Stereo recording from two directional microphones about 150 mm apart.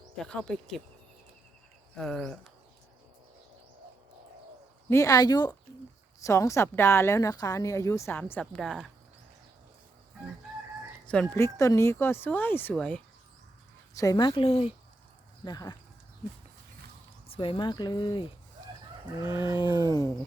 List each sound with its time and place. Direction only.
0.2 s speech: 5° left (ahead or behind)
2.0 s speech: 5° left (ahead or behind)
4.9 s a woman's voice: 20° left (ahead or behind); by 8.9 s 5° left (ahead or behind)
11.0 s a sound: 10° left (ahead or behind)
11.3 s speech: 20° left (ahead or behind)
13.9 s speech: 25° left (ahead or behind); by 14.7 s 45° left (ahead or behind)
15.4 s a woman's voice: 30° left (ahead or behind)
17.2 s speech: 35° left (ahead or behind)
19.5 s a woman's voice: 30° left (ahead or behind)